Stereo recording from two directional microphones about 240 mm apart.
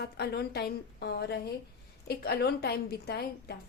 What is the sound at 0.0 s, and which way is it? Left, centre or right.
A woman's voice, left.